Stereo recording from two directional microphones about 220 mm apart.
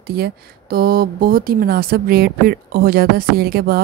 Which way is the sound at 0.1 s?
45° right (ahead or behind).